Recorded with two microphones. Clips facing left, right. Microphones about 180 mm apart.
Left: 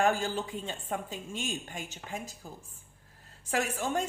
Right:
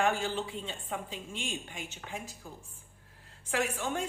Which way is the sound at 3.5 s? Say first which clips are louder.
Left 1 dB; 40° left (ahead or behind).